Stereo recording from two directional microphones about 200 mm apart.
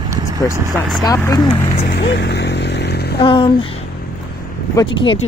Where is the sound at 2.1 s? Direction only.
60° left (ahead or behind).